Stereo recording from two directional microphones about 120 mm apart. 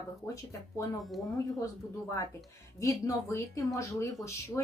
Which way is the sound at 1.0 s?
Centre (ahead or behind).